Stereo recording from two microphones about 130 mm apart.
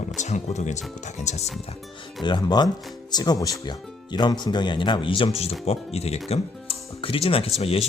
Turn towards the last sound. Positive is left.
turn(degrees=50)  # may be behind; listen again after turning